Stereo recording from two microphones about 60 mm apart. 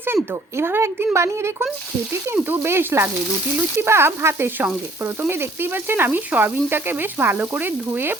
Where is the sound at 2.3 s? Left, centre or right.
Right.